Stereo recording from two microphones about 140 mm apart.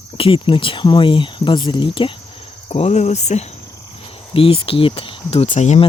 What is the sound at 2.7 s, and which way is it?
Speech, 50° left (ahead or behind).